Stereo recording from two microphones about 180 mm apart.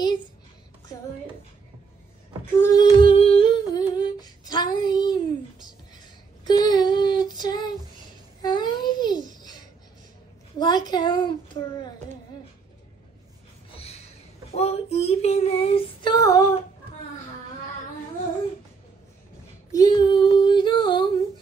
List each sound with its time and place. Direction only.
2.6 s humming: 20° left (ahead or behind)
6.4 s child singing: 25° left (ahead or behind)
8.4 s babbling: 25° left (ahead or behind)
10.6 s a sound: 25° left (ahead or behind)
13.7 s a sound: 35° left (ahead or behind)
14.5 s child singing: 35° left (ahead or behind)
19.7 s child singing: 20° left (ahead or behind)